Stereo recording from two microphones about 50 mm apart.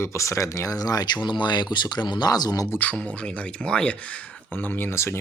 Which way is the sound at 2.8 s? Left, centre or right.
Left.